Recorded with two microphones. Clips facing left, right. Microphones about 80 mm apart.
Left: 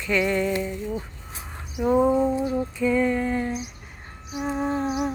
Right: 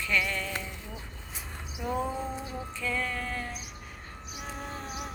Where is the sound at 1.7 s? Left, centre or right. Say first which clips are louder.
Left 12 dB; left.